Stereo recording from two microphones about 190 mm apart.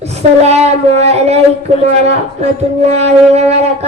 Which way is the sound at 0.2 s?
35° right (ahead or behind).